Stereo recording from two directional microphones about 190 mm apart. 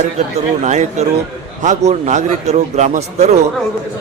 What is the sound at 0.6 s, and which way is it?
A man's voice, 35° right (ahead or behind).